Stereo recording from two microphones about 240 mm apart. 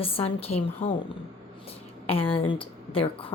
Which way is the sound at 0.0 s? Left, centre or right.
Left.